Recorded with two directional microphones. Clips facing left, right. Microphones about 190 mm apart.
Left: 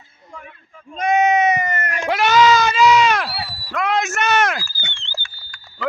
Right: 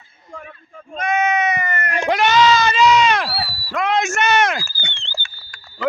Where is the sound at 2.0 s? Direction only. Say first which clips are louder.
Left 1 dB; 5° left (ahead or behind).